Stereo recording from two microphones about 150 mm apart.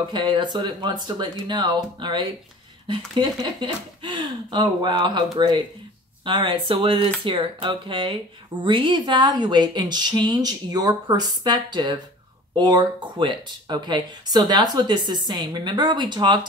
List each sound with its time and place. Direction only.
0.1 s speech: 30° right (ahead or behind)